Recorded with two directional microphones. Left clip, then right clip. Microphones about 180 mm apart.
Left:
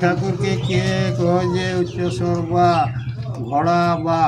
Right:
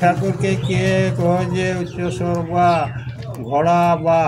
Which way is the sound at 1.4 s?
35° right (ahead or behind).